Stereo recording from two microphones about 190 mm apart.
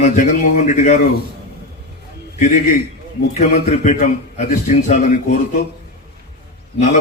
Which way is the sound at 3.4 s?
40° left (ahead or behind).